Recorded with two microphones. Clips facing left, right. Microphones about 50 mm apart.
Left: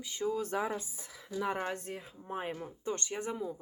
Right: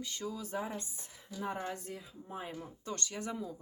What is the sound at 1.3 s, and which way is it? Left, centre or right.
Speech, left.